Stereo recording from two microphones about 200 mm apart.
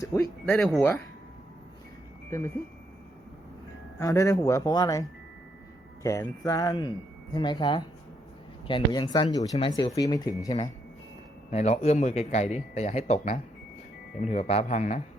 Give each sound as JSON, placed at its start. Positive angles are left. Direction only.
{"t": 0.0, "sound": "speech", "side_deg": 15}
{"t": 4.0, "sound": "speech", "side_deg": 15}
{"t": 11.5, "sound": "a man's voice", "side_deg": 35}